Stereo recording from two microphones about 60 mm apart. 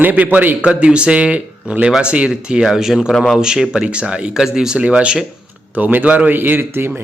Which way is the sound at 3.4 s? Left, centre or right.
Centre.